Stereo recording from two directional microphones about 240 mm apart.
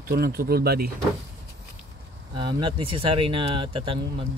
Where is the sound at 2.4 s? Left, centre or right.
Centre.